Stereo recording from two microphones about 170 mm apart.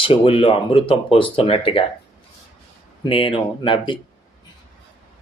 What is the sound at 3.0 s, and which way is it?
Speech, 30° left (ahead or behind).